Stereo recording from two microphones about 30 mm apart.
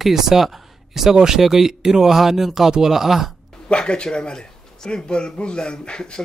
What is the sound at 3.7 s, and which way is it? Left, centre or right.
Speech, left.